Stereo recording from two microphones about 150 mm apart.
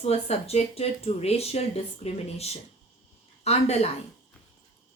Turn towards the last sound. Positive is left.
turn(degrees=45)  # may be behind; listen again after turning